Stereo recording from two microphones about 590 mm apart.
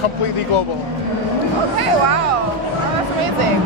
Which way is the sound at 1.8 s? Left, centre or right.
Right.